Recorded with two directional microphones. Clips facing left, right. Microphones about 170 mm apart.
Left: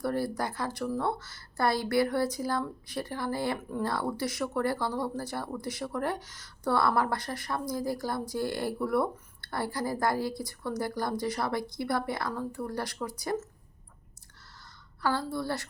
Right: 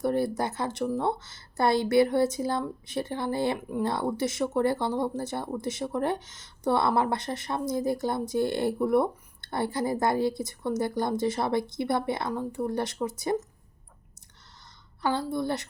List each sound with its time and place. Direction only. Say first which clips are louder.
0.0 s speech: right 4 dB; 20° right (ahead or behind)
15.0 s speech: right 3 dB; 20° right (ahead or behind)